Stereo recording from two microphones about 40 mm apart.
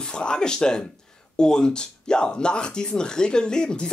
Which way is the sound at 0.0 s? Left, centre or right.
Left.